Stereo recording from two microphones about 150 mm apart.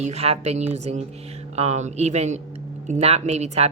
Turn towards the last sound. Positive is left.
turn(degrees=-50)  # may be behind; listen again after turning